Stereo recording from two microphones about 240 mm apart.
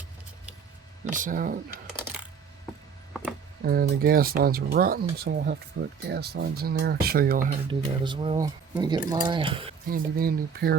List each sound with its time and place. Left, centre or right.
1.1 s speech: right
3.1 s a sound: centre
3.6 s speech: right
7.7 s speech: centre
9.9 s speech: right